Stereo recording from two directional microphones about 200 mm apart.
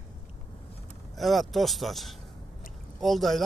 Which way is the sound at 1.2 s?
Centre (ahead or behind).